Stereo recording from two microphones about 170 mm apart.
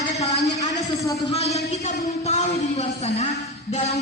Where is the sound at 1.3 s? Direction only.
40° left (ahead or behind).